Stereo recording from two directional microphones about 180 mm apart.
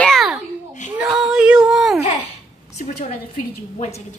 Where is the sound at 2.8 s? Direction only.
40° left (ahead or behind).